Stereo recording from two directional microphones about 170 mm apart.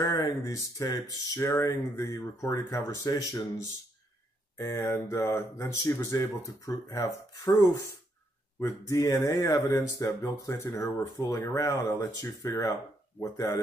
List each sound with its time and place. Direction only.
0.0 s speech: 20° left (ahead or behind)
4.6 s speech: 15° left (ahead or behind)